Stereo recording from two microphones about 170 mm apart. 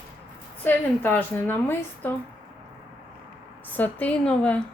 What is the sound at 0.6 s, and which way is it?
A woman's voice, 10° left (ahead or behind).